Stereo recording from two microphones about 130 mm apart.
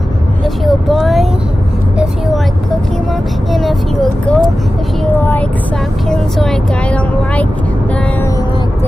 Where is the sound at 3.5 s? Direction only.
Centre (ahead or behind).